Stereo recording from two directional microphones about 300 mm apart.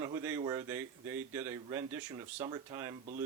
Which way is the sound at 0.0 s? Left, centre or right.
Centre.